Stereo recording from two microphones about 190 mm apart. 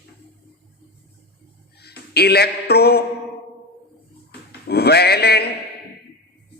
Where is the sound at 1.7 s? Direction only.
55° left (ahead or behind).